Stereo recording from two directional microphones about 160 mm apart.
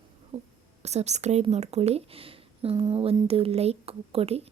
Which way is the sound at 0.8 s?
45° right (ahead or behind).